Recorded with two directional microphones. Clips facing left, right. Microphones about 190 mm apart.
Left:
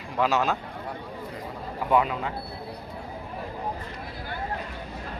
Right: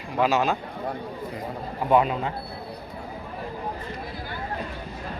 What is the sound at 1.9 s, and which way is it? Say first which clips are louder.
Speech: right 3 dB; 25° right (ahead or behind).